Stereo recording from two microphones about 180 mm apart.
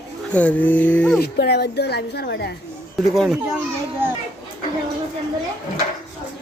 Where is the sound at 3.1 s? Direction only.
Centre (ahead or behind).